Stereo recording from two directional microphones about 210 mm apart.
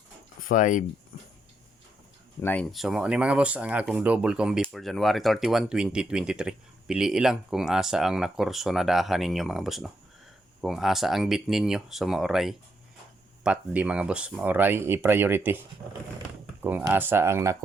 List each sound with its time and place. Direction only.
0.4 s speech: 40° left (ahead or behind)
2.4 s speech: 5° left (ahead or behind); by 17.6 s 15° right (ahead or behind)